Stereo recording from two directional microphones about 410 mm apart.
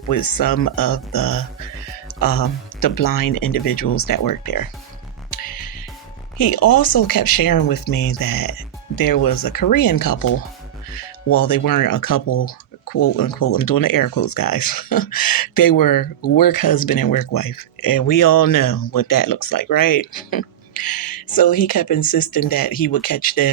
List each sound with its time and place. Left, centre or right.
0.1 s speech: left
5.3 s music: left
6.3 s speech: left
11.3 s speech: left
13.5 s speech: left